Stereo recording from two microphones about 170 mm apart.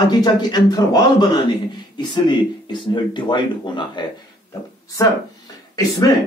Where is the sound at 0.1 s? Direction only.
25° left (ahead or behind).